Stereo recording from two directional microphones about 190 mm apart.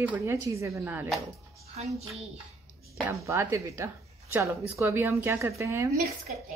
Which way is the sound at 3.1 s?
15° right (ahead or behind).